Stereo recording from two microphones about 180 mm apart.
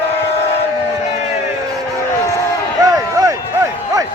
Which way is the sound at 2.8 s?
20° right (ahead or behind).